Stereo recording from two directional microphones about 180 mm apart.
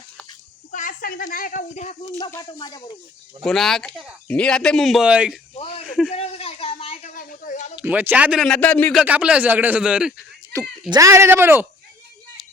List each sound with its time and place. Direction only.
0.7 s speech: 45° left (ahead or behind)
2.1 s speech: 20° left (ahead or behind)
3.4 s speech: centre (ahead or behind)
5.5 s a sound: 30° left (ahead or behind); by 7.7 s 45° left (ahead or behind)
7.8 s speech: 10° right (ahead or behind); by 9.0 s 10° left (ahead or behind)
9.0 s speech: 5° right (ahead or behind)
10.5 s speech: 15° right (ahead or behind)